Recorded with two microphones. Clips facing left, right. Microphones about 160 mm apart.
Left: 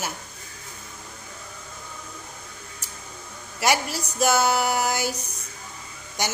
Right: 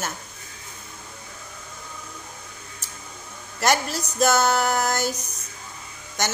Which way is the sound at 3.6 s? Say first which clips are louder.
Right 1 dB; 10° left (ahead or behind).